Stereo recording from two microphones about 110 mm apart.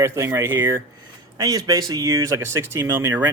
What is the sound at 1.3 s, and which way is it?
Speech, 35° right (ahead or behind).